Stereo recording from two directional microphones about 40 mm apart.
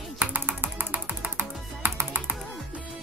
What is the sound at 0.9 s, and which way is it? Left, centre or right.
Music, right.